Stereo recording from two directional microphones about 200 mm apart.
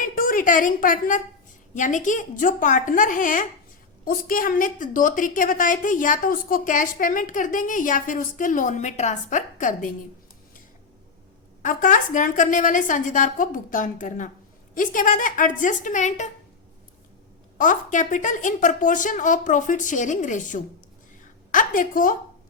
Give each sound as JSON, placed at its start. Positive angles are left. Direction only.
{"t": 0.0, "sound": "a woman's voice", "side_deg": 45}
{"t": 11.6, "sound": "a woman's voice", "side_deg": 40}
{"t": 17.6, "sound": "a woman's voice", "side_deg": 40}